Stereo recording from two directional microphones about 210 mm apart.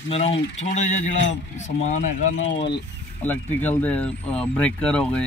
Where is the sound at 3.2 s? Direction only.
10° left (ahead or behind).